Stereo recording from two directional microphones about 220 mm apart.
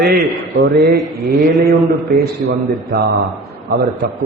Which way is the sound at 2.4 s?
45° right (ahead or behind).